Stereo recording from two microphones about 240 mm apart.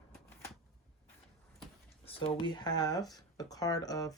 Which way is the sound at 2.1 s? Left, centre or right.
Left.